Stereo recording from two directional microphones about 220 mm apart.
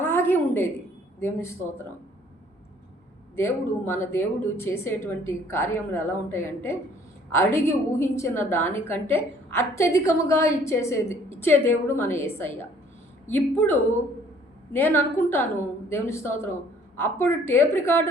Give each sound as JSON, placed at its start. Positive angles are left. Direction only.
{"t": 0.0, "sound": "a sound", "side_deg": 10}
{"t": 1.2, "sound": "a woman's voice", "side_deg": 10}
{"t": 3.3, "sound": "a woman's voice", "side_deg": 10}